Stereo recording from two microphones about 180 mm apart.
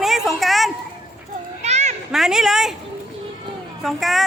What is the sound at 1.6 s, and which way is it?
Children playing, 40° right (ahead or behind).